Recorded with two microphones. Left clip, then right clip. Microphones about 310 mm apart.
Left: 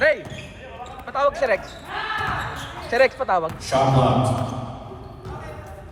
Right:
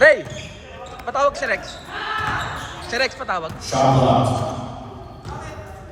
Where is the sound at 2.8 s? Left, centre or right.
Left.